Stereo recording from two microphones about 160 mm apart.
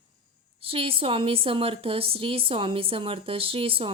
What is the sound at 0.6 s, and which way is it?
A woman's voice, 35° right (ahead or behind).